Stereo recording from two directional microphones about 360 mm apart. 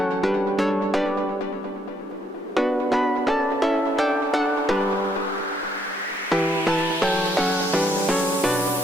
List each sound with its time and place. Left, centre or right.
0.0 s music: centre
2.6 s music: centre
6.3 s music: centre